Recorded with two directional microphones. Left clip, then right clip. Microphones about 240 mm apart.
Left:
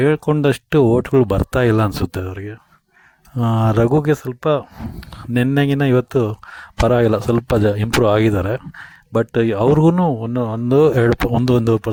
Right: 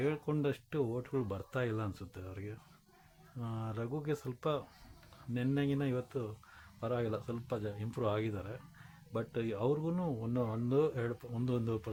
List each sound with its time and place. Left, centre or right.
0.0 s speech: left